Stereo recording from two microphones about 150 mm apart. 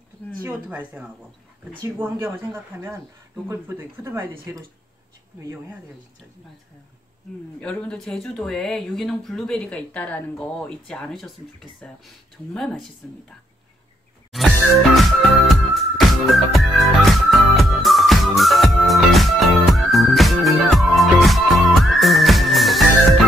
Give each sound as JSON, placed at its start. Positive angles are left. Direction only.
{"t": 0.4, "sound": "speech", "side_deg": -10}
{"t": 7.6, "sound": "speech", "side_deg": 5}
{"t": 14.3, "sound": "music", "side_deg": 0}